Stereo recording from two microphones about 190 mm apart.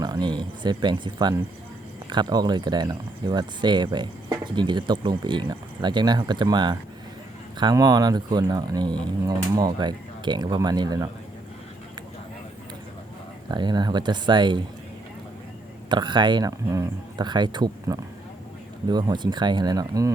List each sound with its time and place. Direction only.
0.0 s speech: 20° right (ahead or behind)
13.5 s speech: 25° right (ahead or behind)
15.9 s speech: 25° right (ahead or behind)